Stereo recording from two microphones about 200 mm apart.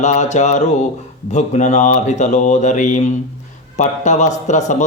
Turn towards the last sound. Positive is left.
turn(degrees=35)  # may be behind; listen again after turning